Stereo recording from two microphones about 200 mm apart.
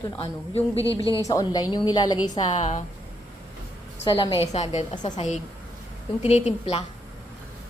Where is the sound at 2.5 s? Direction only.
35° left (ahead or behind).